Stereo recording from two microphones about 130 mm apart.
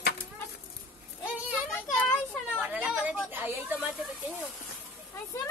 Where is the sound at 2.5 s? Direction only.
10° right (ahead or behind).